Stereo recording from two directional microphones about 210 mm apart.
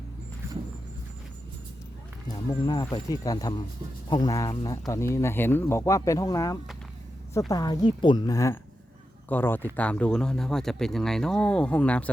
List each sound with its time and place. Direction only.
2.9 s speech: 15° left (ahead or behind)